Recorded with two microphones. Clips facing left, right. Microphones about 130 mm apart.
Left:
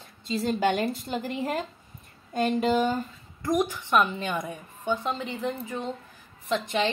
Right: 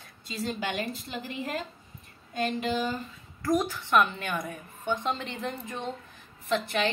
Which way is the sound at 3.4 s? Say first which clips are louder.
Left 1 dB; 15° left (ahead or behind).